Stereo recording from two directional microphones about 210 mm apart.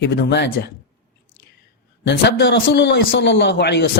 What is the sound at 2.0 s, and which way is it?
A man's voice, 55° left (ahead or behind).